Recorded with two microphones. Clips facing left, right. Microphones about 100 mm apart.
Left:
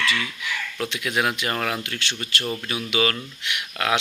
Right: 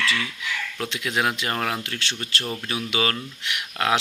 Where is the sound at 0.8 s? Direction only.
30° right (ahead or behind).